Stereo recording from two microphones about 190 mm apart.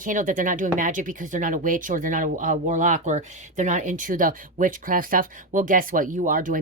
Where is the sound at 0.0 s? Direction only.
45° right (ahead or behind).